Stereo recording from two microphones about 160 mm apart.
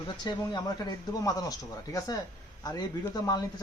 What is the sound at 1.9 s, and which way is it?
Speech, 20° left (ahead or behind).